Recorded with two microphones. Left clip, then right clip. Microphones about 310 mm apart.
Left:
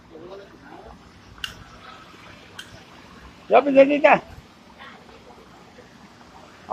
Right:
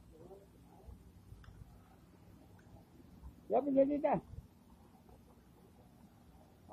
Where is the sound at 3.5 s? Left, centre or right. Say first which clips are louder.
Left 17 dB; left.